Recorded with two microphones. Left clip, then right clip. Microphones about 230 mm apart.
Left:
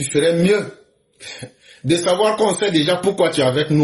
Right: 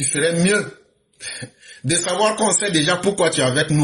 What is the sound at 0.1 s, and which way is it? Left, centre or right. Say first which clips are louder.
Speech: left 3 dB; right.